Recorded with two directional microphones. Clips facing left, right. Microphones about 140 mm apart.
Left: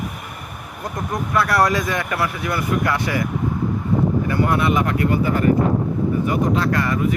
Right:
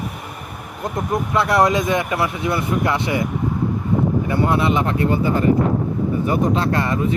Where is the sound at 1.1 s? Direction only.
25° right (ahead or behind).